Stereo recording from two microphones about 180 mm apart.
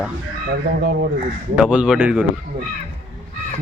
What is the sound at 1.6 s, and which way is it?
Speech, 5° right (ahead or behind).